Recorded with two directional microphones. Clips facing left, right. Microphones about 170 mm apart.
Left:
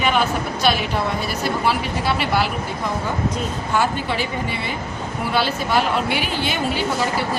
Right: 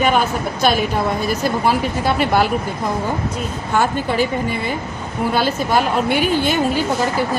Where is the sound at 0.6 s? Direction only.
45° right (ahead or behind).